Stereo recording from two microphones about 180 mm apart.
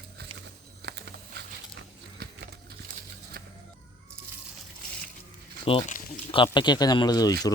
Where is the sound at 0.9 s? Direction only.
65° right (ahead or behind).